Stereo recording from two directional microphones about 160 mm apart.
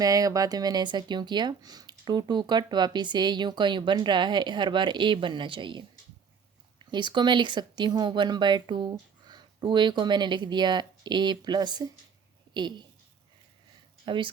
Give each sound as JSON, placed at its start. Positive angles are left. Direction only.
{"t": 0.0, "sound": "speech", "side_deg": -20}
{"t": 14.0, "sound": "speech", "side_deg": -30}